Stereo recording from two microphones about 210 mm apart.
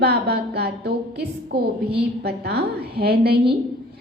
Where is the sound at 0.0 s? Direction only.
50° right (ahead or behind).